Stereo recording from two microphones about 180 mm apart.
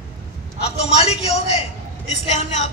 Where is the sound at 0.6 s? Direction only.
35° left (ahead or behind).